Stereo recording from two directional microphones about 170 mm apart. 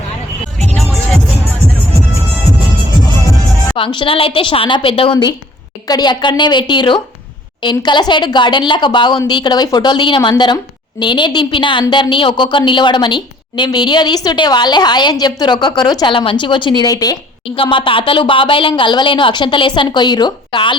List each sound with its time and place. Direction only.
3.8 s a woman's voice: 30° left (ahead or behind)